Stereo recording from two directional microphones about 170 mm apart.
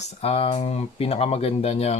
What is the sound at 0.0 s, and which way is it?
Speech, 35° left (ahead or behind).